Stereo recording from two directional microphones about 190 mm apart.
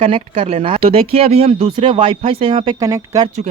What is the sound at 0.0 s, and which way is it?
Speech, 30° right (ahead or behind).